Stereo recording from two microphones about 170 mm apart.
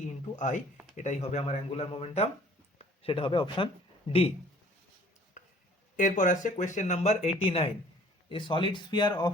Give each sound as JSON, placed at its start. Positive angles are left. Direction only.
{"t": 0.3, "sound": "speech", "side_deg": 45}
{"t": 5.4, "sound": "a sound", "side_deg": 45}
{"t": 6.0, "sound": "speech", "side_deg": 50}